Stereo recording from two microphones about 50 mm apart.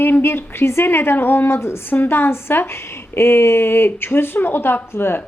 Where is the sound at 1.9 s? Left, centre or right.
Left.